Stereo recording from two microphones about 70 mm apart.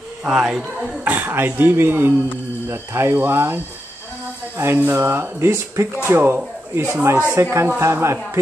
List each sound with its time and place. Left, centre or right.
0.4 s speech: centre
1.0 s speech: right
7.3 s speech: right